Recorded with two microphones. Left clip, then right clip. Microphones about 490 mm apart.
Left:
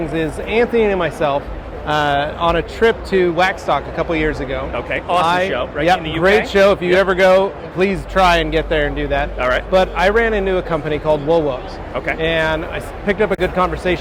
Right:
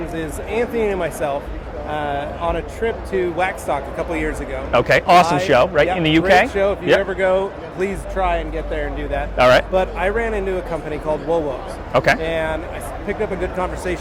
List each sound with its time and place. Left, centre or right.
0.1 s speech: left
4.7 s speech: right
5.2 s speech: left
5.5 s speech: right
6.5 s speech: left
9.4 s speech: right
9.7 s speech: left